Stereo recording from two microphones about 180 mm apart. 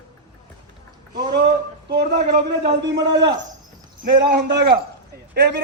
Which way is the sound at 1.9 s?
65° right (ahead or behind).